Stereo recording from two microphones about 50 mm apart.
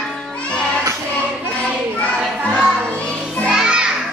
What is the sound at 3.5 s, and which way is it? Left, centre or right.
Music, centre.